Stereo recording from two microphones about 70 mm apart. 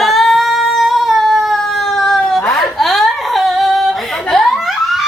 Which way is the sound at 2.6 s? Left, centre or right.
Centre.